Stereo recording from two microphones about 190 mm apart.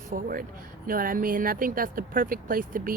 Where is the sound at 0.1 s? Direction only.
50° right (ahead or behind).